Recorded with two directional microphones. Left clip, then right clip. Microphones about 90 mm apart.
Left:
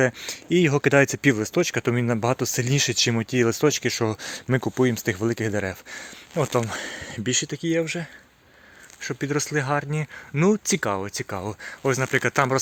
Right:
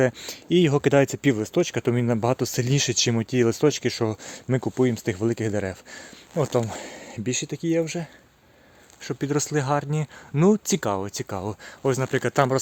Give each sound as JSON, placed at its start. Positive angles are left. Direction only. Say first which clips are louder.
{"t": 0.2, "sound": "speech", "louder": "even", "side_deg": -30}
{"t": 1.0, "sound": "speech", "louder": "left 2 dB", "side_deg": -15}
{"t": 4.0, "sound": "speech", "louder": "left 1 dB", "side_deg": -15}
{"t": 6.6, "sound": "speech", "louder": "left 1 dB", "side_deg": -10}
{"t": 7.5, "sound": "speech", "louder": "even", "side_deg": -25}
{"t": 9.0, "sound": "speech", "louder": "left 1 dB", "side_deg": -40}
{"t": 9.3, "sound": "speech", "louder": "even", "side_deg": -55}
{"t": 10.8, "sound": "speech", "louder": "left 1 dB", "side_deg": -45}